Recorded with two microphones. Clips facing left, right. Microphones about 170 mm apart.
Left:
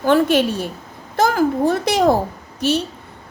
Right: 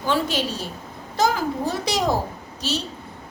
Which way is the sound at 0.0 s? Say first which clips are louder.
Left 8 dB; 55° left (ahead or behind).